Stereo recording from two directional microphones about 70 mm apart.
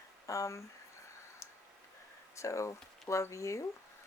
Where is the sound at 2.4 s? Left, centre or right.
Left.